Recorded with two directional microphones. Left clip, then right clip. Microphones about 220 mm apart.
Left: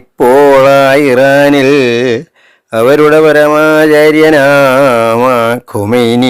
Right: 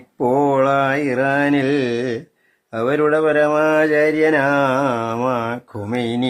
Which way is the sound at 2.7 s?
40° left (ahead or behind).